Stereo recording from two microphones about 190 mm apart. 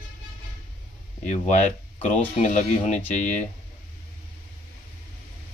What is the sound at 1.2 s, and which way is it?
Speech, 40° left (ahead or behind).